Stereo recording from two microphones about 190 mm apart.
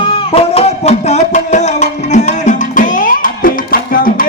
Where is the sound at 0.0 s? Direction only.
30° left (ahead or behind).